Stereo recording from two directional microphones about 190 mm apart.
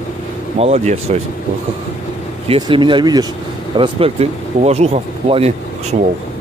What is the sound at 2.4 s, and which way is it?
Speech, 30° right (ahead or behind).